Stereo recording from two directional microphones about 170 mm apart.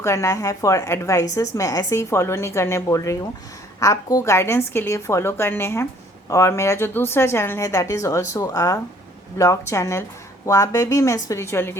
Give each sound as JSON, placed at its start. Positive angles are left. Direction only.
{"t": 0.0, "sound": "a woman's voice", "side_deg": 15}